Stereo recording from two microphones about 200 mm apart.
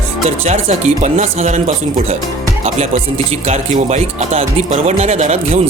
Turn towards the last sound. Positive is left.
turn(degrees=-35)  # may be behind; listen again after turning